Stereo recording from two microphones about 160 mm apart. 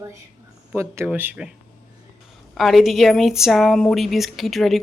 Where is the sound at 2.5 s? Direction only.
Centre (ahead or behind).